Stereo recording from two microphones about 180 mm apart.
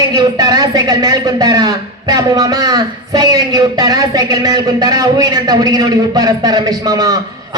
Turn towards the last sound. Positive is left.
turn(degrees=-20)  # may be behind; listen again after turning